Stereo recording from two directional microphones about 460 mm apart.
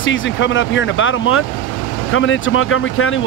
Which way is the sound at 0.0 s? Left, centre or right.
Left.